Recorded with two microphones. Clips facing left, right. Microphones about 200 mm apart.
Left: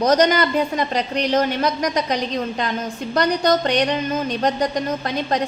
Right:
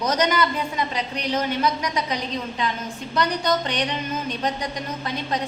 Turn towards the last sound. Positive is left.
turn(degrees=40)  # may be behind; listen again after turning